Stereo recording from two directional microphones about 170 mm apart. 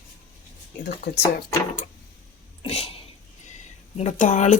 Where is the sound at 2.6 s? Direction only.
35° left (ahead or behind).